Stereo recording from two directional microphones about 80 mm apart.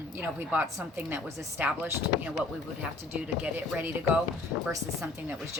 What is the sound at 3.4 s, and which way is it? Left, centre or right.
Speech, right.